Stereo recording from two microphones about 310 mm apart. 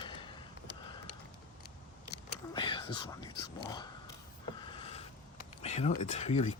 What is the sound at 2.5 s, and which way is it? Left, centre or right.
Whispering, centre.